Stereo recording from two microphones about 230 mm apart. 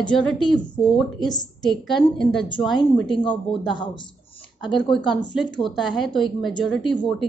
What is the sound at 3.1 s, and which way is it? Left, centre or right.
Speech, left.